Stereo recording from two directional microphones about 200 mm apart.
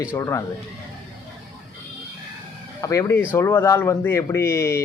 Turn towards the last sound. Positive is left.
turn(degrees=15)  # may be behind; listen again after turning